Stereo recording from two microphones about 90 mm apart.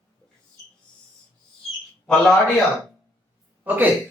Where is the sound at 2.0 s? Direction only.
10° left (ahead or behind).